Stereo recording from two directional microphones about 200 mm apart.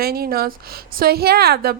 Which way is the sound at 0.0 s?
50° right (ahead or behind).